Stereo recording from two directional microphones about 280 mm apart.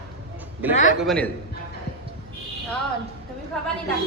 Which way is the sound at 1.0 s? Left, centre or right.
Centre.